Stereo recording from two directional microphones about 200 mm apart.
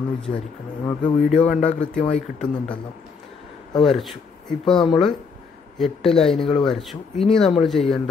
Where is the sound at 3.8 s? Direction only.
Centre (ahead or behind).